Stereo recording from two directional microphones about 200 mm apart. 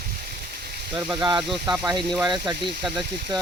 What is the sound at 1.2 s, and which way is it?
Speech, 20° right (ahead or behind).